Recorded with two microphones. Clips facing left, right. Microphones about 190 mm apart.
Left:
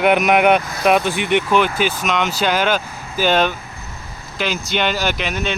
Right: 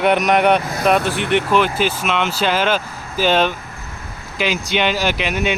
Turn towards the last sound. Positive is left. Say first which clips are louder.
# right 2 dB
turn(degrees=-5)  # may be behind; listen again after turning